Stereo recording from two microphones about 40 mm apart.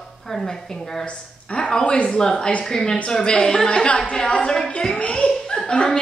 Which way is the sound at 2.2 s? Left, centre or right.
Centre.